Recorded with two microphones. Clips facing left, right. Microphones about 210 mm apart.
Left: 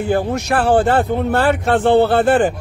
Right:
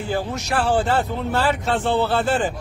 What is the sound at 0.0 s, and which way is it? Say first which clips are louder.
Speech: left 7 dB; 55° left (ahead or behind).